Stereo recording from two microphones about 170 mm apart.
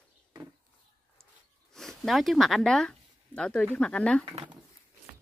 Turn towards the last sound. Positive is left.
turn(degrees=-30)  # may be behind; listen again after turning